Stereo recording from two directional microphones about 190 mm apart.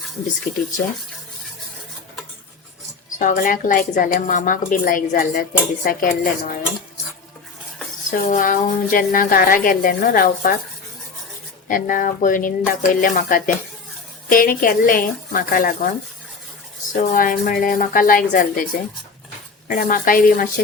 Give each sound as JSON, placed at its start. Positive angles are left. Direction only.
{"t": 3.2, "sound": "a woman's voice", "side_deg": 45}
{"t": 8.1, "sound": "a woman's voice", "side_deg": 45}
{"t": 11.7, "sound": "a woman's voice", "side_deg": 45}
{"t": 16.9, "sound": "a woman's voice", "side_deg": 45}
{"t": 19.6, "sound": "a woman's voice", "side_deg": 50}